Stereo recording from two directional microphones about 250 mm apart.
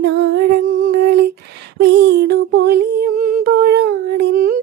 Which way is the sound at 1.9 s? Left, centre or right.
Right.